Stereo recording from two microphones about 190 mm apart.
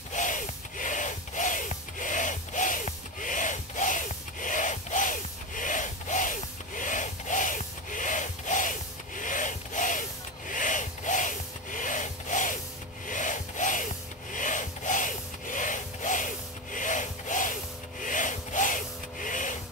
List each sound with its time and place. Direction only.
0.1 s music: 40° left (ahead or behind)
10.5 s rub: 40° left (ahead or behind)
13.0 s wood: 40° left (ahead or behind)
18.0 s rub: 40° left (ahead or behind)